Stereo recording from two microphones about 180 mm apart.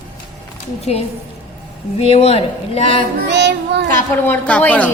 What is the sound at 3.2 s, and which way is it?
Child singing, 70° right (ahead or behind).